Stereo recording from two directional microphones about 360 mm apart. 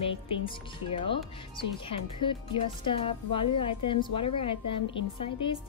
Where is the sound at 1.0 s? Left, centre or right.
Centre.